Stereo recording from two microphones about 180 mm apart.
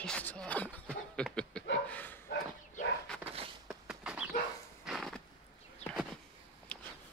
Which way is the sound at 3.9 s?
5° right (ahead or behind).